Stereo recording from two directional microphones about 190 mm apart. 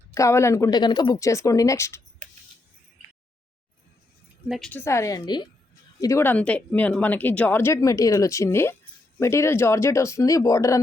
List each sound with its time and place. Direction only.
0.1 s speech: 15° left (ahead or behind)
4.4 s a woman's voice: centre (ahead or behind)
4.7 s speech: 15° left (ahead or behind)